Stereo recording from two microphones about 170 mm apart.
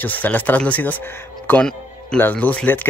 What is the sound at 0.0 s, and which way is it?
Speech, 10° left (ahead or behind).